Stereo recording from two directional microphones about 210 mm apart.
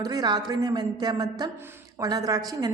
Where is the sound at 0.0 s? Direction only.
20° right (ahead or behind).